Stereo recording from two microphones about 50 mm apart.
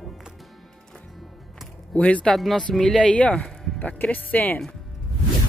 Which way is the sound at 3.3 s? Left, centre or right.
Centre.